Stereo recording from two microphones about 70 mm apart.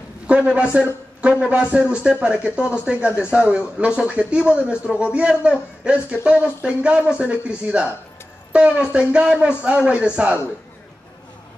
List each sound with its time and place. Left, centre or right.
0.3 s speech: centre